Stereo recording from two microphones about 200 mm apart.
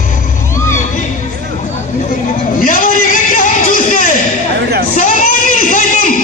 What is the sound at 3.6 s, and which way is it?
Music, 40° left (ahead or behind).